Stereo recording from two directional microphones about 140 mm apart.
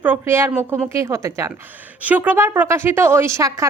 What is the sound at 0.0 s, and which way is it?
A woman's voice, 15° right (ahead or behind).